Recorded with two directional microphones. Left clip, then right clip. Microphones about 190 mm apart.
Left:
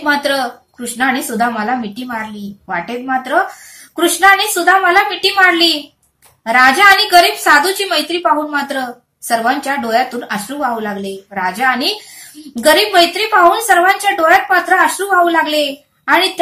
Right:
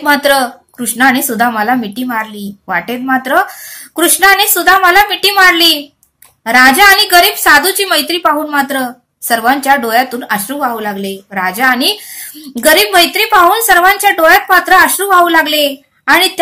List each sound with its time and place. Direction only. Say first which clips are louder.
0.0 s a woman's voice: right 5 dB; 40° right (ahead or behind)